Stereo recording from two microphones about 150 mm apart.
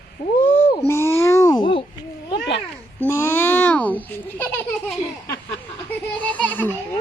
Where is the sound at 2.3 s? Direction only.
35° left (ahead or behind).